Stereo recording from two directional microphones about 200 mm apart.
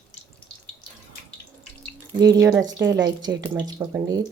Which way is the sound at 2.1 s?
20° right (ahead or behind).